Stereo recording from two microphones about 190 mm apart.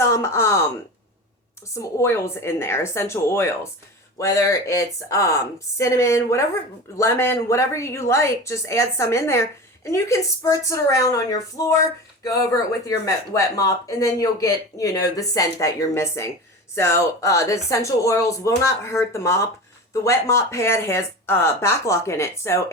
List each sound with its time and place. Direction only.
0.0 s speech: 15° left (ahead or behind)
1.7 s a woman's voice: 15° left (ahead or behind)